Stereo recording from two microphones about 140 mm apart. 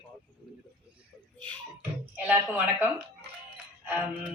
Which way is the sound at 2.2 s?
10° right (ahead or behind).